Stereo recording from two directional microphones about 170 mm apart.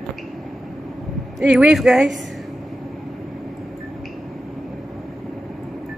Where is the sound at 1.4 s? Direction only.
5° right (ahead or behind).